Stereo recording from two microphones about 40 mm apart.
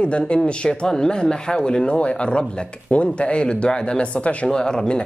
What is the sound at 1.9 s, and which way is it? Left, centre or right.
Speech, left.